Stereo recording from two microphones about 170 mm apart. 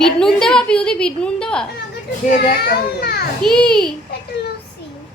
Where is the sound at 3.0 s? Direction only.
65° left (ahead or behind).